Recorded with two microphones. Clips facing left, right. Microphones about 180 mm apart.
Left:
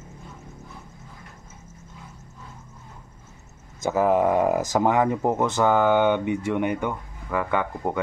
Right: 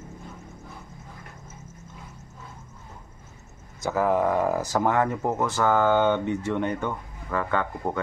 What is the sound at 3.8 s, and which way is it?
Speech, 20° left (ahead or behind).